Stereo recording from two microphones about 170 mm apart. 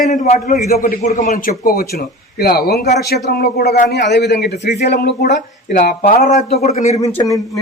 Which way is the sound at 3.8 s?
80° left.